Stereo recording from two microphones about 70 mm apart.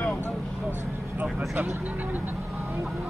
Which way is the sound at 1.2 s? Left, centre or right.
Right.